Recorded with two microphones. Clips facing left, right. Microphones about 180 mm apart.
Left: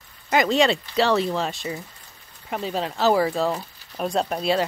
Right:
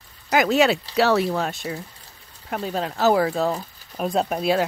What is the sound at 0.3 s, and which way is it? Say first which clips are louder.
Speech: right 1 dB; 5° right (ahead or behind).